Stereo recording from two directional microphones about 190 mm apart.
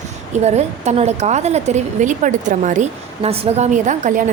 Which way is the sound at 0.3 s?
35° right (ahead or behind).